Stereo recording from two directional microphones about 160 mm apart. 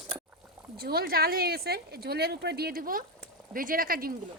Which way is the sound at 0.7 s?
75° right (ahead or behind).